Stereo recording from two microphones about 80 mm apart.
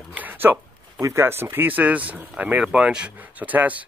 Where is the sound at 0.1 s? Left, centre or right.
Right.